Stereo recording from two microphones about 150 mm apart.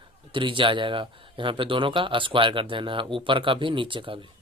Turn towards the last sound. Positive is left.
turn(degrees=-35)  # may be behind; listen again after turning